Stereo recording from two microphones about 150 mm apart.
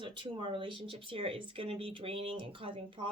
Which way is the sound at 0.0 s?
35° right (ahead or behind).